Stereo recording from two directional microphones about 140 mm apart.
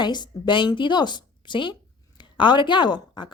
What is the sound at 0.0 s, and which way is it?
Speech, 35° left (ahead or behind).